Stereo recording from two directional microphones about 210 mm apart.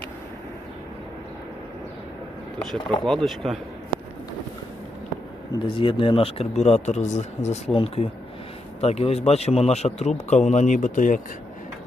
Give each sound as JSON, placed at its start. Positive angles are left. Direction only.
{"t": 3.0, "sound": "speech", "side_deg": 0}
{"t": 5.6, "sound": "speech", "side_deg": 25}